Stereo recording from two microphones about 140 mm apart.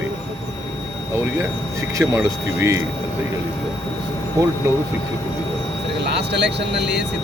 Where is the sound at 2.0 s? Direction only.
20° right (ahead or behind).